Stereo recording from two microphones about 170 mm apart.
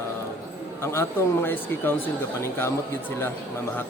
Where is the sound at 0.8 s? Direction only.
15° left (ahead or behind).